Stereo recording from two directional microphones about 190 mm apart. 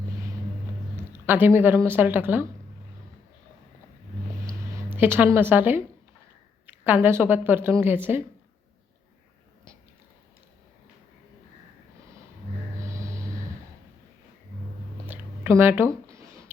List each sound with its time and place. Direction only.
0.9 s speech: 10° right (ahead or behind)
4.4 s music: 15° right (ahead or behind)
6.7 s a woman's voice: 10° right (ahead or behind)
12.8 s snort: 15° right (ahead or behind)
15.0 s a sound: 10° right (ahead or behind)